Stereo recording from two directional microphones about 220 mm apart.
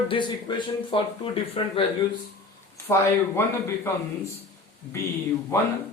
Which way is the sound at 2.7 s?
10° left (ahead or behind).